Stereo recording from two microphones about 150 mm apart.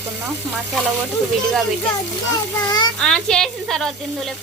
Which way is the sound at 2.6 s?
30° left (ahead or behind).